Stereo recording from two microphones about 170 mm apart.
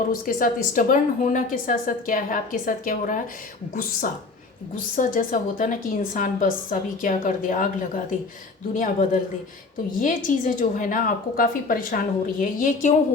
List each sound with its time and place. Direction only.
0.1 s a woman's voice: 55° left (ahead or behind)
4.9 s a woman's voice: 50° left (ahead or behind)
8.7 s a woman's voice: 50° left (ahead or behind)